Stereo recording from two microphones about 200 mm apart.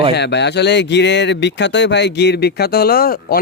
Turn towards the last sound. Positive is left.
turn(degrees=50)  # may be behind; listen again after turning